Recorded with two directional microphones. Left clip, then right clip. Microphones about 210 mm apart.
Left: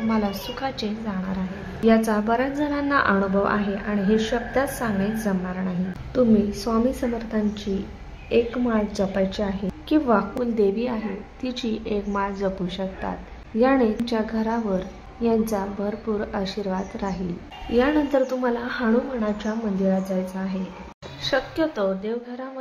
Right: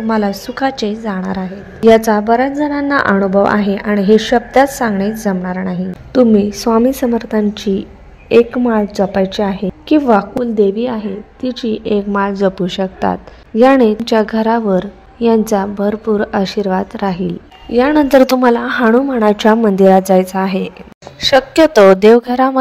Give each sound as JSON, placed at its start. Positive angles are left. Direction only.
{"t": 0.1, "sound": "a woman's voice", "side_deg": -30}